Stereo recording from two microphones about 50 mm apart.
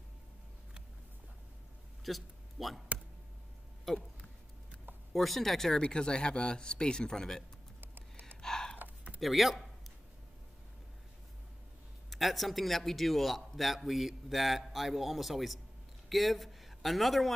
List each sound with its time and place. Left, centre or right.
2.0 s a sound: centre
5.1 s a man's voice: centre
8.4 s gasp: centre
9.2 s a man's voice: centre
12.1 s a man's voice: centre